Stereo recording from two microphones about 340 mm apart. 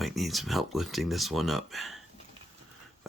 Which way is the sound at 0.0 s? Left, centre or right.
Centre.